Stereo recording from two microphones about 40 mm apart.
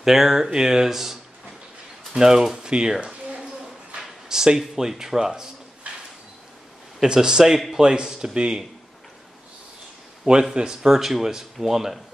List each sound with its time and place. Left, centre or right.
0.0 s speech: centre
2.1 s speech: centre
4.3 s speech: centre
7.0 s speech: centre
10.5 s speech: centre